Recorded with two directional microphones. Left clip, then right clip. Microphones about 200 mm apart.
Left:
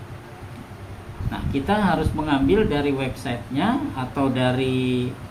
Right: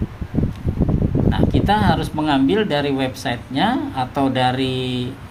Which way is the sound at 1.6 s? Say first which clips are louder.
Right 1 dB; 65° right (ahead or behind).